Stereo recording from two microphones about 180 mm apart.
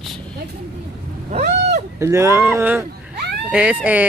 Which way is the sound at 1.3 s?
40° right (ahead or behind).